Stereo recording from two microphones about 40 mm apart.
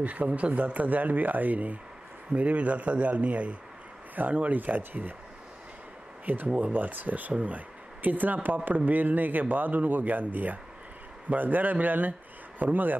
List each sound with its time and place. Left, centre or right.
0.0 s speech: right
4.1 s speech: right
6.2 s speech: right